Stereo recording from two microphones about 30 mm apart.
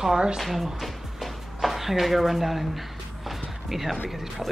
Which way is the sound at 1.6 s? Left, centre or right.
Centre.